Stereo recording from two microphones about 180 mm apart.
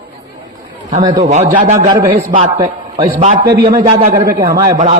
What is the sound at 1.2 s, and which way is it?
Speech, 40° right (ahead or behind).